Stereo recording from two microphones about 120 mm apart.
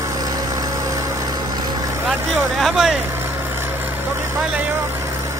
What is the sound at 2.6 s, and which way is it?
Vehicle, centre (ahead or behind).